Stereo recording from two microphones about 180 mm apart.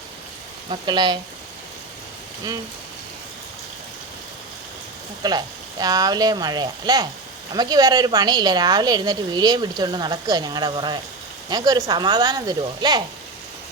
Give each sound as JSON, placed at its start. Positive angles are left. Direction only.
{"t": 0.7, "sound": "speech", "side_deg": -25}
{"t": 5.2, "sound": "speech", "side_deg": -20}